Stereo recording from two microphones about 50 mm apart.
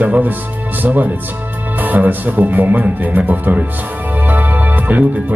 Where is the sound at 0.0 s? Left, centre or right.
Right.